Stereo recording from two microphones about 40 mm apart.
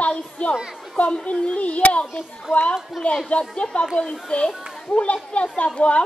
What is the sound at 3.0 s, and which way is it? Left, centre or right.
Speech, centre.